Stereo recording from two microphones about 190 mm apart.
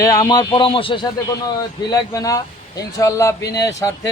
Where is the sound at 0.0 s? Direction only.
20° left (ahead or behind).